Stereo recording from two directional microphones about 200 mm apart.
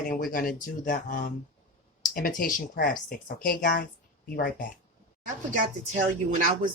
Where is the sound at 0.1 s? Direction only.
45° left (ahead or behind).